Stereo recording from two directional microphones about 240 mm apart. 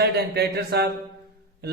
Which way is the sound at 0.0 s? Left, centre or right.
Right.